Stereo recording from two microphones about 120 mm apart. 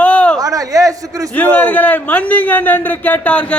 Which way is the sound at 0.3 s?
30° right (ahead or behind).